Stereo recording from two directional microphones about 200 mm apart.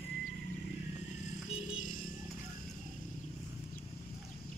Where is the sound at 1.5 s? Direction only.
40° left (ahead or behind).